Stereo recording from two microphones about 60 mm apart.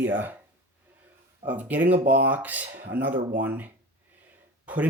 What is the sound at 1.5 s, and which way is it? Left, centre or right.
Speech, right.